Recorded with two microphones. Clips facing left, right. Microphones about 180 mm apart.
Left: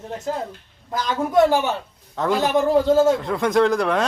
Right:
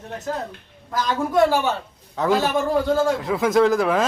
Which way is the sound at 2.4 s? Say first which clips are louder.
Left 3 dB; 20° left (ahead or behind).